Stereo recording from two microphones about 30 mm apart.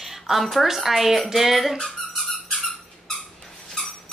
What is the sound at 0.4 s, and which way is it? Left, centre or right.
Speech, centre.